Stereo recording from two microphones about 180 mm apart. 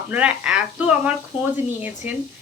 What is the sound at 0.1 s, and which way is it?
Speech, 5° right (ahead or behind).